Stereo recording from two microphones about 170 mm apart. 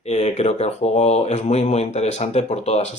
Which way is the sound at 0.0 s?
40° left (ahead or behind).